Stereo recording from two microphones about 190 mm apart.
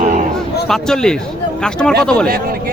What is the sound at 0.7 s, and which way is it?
Speech, 5° left (ahead or behind).